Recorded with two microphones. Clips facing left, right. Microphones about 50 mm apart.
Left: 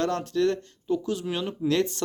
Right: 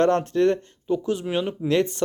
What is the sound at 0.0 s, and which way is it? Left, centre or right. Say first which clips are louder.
Speech: right 6 dB; right.